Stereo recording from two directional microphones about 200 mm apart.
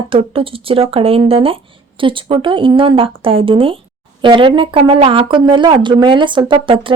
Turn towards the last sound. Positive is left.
turn(degrees=-25)  # may be behind; listen again after turning